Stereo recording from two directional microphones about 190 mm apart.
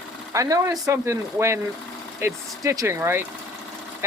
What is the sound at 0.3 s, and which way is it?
Speech, 15° right (ahead or behind).